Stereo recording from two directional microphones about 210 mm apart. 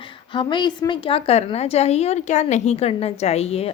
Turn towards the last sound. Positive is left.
turn(degrees=30)  # may be behind; listen again after turning